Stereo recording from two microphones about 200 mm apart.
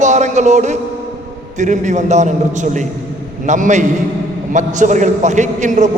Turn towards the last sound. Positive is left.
turn(degrees=-35)  # may be behind; listen again after turning